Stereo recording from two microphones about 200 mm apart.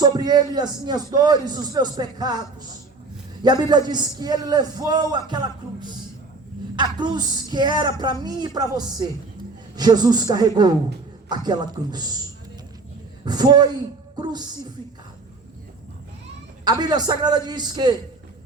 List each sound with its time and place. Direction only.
0.0 s a man's voice: 20° right (ahead or behind)
13.2 s a man's voice: 20° right (ahead or behind)
16.6 s a man's voice: 20° right (ahead or behind)